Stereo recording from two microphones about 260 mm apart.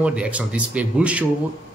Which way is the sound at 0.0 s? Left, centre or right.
Centre.